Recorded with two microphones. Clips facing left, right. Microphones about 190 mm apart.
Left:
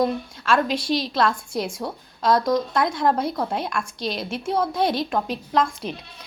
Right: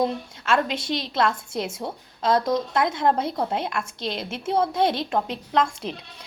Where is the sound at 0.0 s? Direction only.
20° right (ahead or behind).